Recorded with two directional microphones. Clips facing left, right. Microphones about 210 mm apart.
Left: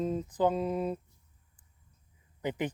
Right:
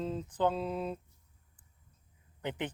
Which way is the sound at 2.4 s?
10° left (ahead or behind).